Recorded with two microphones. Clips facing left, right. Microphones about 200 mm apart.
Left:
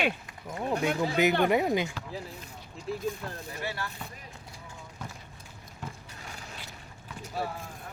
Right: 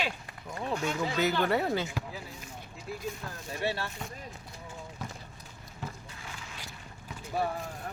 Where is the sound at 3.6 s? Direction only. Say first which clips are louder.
Right 4 dB; 25° right (ahead or behind).